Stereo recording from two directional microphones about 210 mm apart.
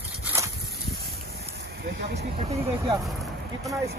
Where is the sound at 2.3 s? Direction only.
25° right (ahead or behind).